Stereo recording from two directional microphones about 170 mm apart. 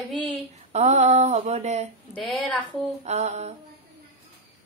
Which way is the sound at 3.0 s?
40° right (ahead or behind).